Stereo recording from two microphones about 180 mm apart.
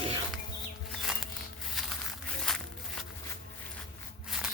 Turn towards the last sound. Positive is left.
turn(degrees=-5)  # may be behind; listen again after turning